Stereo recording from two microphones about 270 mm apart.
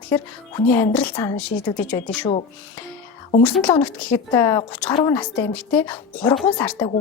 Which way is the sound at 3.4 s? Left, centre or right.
Centre.